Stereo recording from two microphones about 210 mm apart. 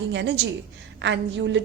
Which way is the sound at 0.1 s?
60° right (ahead or behind).